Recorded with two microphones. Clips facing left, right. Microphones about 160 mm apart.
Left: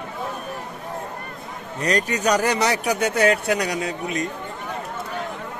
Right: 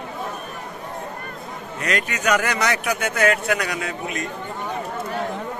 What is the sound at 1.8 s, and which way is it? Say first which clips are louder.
A man's voice: left 3 dB; 35° left (ahead or behind).